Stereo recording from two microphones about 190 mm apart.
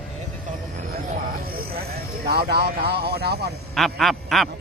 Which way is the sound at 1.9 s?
55° right (ahead or behind).